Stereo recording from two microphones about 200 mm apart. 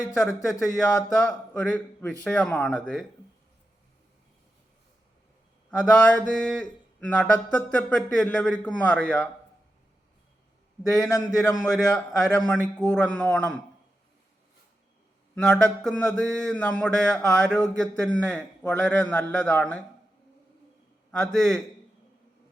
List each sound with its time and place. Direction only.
0.5 s speech: 15° left (ahead or behind)
1.3 s speech: 5° left (ahead or behind)
5.7 s mantra: 5° left (ahead or behind)
11.0 s speech: 15° left (ahead or behind)
11.6 s mantra: 5° left (ahead or behind)
15.4 s mantra: 5° left (ahead or behind)
21.3 s mantra: 5° left (ahead or behind)